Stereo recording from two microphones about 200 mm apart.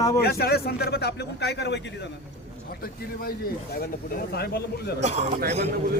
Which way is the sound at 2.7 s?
50° left (ahead or behind).